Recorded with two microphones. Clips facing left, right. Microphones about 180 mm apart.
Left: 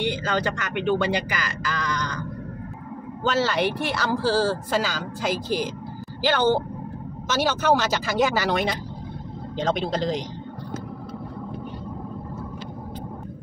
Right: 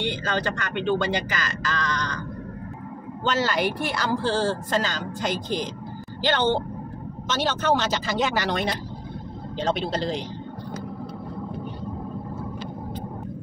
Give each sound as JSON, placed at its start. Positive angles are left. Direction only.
{"t": 0.7, "sound": "speech", "side_deg": 10}
{"t": 3.3, "sound": "speech", "side_deg": 0}